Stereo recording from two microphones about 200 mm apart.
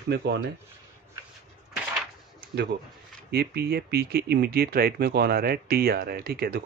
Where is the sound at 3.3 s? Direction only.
55° right (ahead or behind).